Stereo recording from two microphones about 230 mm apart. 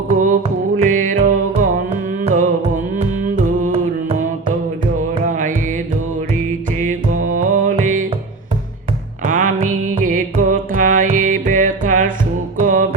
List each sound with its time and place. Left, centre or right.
0.1 s music: right
5.3 s music: right
7.1 s music: right
7.5 s music: right
9.2 s music: right